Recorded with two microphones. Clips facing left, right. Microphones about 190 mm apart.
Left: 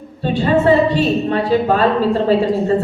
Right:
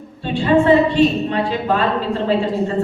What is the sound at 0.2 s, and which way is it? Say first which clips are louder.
A woman's voice: even; 40° left (ahead or behind).